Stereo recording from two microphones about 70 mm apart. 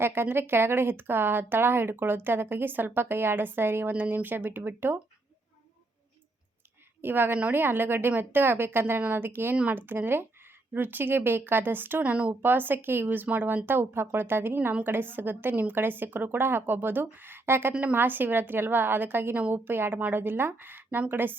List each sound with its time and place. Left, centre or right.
0.0 s speech: right
7.0 s a woman's voice: right